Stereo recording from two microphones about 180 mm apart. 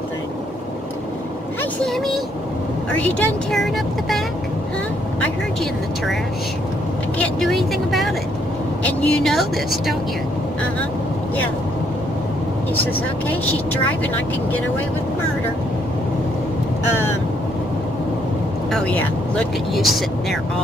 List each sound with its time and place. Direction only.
1.6 s vehicle: 5° left (ahead or behind)
3.0 s speech: 10° left (ahead or behind)
7.2 s speech: centre (ahead or behind)
13.3 s speech: 10° left (ahead or behind)
18.7 s speech: 5° left (ahead or behind)